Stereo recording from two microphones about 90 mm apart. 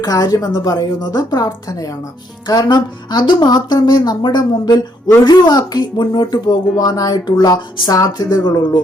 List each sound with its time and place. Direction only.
0.0 s speech: 45° left (ahead or behind)